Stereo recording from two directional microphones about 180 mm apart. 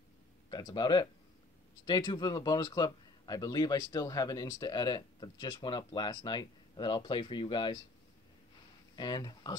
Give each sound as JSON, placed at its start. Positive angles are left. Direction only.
{"t": 0.5, "sound": "speech", "side_deg": 25}
{"t": 8.9, "sound": "speech", "side_deg": 20}